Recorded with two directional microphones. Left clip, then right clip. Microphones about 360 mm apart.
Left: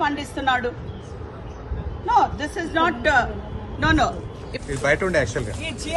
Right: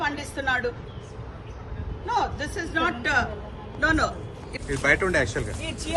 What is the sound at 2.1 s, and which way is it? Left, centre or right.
Speech, centre.